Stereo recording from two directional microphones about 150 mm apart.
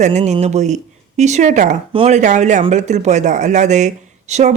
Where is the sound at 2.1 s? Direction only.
55° right (ahead or behind).